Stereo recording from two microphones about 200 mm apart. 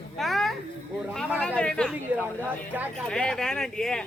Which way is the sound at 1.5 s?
5° left (ahead or behind).